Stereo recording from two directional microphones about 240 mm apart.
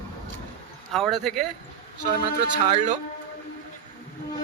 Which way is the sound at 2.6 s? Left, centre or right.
Right.